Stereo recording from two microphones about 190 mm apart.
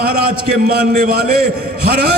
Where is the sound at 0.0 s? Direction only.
50° right (ahead or behind).